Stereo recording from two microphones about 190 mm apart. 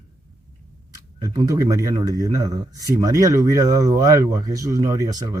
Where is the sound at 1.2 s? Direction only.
20° right (ahead or behind).